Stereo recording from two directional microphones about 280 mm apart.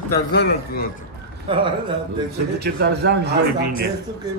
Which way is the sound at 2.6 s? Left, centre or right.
Right.